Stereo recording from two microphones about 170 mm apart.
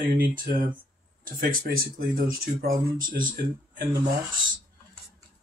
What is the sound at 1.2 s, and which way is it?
Speech, 55° right (ahead or behind).